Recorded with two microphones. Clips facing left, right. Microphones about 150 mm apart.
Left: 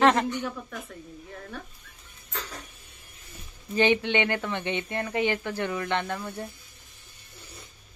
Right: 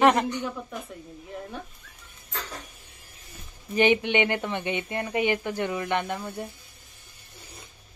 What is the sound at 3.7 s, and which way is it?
Speech, 15° right (ahead or behind).